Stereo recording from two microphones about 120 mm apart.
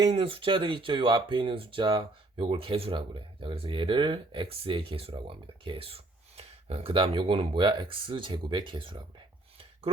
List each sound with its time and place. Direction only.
0.1 s speech: 50° right (ahead or behind)